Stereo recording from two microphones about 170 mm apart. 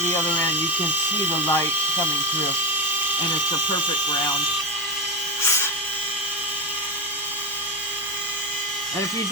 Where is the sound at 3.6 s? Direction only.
25° left (ahead or behind).